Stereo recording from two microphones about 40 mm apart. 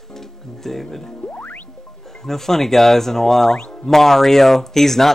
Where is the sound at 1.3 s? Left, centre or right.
Left.